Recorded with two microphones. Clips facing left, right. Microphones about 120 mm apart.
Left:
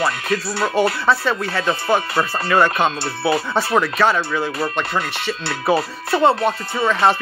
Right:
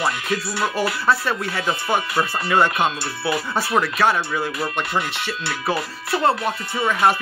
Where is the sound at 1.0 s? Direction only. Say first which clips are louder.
Left 2 dB; 10° right (ahead or behind).